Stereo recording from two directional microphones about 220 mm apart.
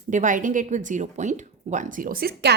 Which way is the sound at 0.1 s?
35° right (ahead or behind).